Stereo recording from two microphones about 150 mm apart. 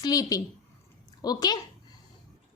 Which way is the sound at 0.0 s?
25° left (ahead or behind).